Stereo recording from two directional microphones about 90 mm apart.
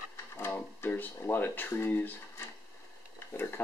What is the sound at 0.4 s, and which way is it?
Speech, 25° left (ahead or behind).